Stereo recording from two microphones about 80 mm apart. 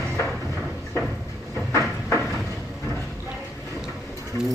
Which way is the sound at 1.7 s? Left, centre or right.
Left.